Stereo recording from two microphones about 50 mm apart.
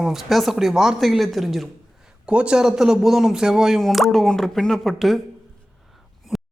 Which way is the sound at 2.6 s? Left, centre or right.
Centre.